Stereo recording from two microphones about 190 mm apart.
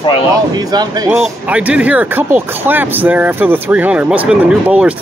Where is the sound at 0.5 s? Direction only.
20° right (ahead or behind).